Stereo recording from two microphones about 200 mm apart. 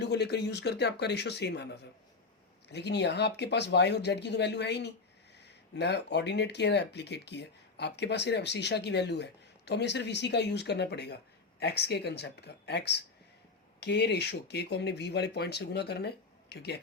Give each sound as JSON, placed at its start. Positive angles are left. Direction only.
{"t": 0.0, "sound": "speech", "side_deg": 55}